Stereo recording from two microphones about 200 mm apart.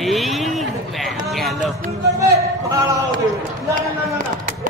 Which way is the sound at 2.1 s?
15° right (ahead or behind).